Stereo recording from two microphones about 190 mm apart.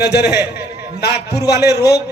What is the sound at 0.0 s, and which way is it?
Speech, 60° left (ahead or behind).